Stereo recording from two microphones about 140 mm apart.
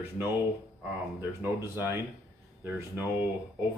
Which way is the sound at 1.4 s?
15° right (ahead or behind).